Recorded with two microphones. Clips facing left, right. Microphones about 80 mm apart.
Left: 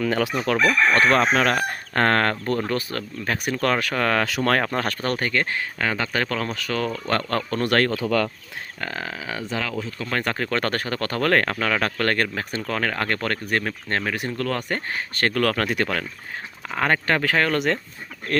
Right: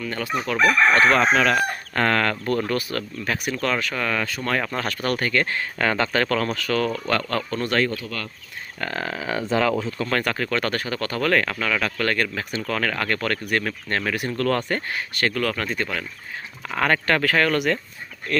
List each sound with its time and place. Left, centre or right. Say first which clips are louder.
0.0 s chicken: left 4 dB; left
1.1 s speech: right 1 dB; left
2.5 s speech: right 1 dB; left
3.3 s speech: left 2 dB; left
4.6 s speech: left 2 dB; left
5.0 s speech: right 5 dB; left
5.8 s speech: right 4 dB; centre
7.1 s speech: even; left
7.6 s speech: left 2 dB; left
8.8 s speech: right 3 dB; centre
10.1 s speech: even; left
14.4 s speech: right 4 dB; centre
14.8 s speech: even; left
16.6 s speech: right 1 dB; centre; by 17.7 s left